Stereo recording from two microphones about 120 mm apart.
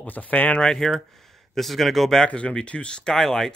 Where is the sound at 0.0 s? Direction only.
15° left (ahead or behind).